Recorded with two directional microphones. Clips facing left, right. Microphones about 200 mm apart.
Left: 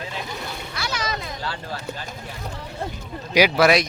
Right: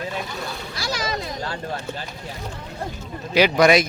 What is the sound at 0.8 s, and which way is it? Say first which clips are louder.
Children playing: right 2 dB; 35° right (ahead or behind).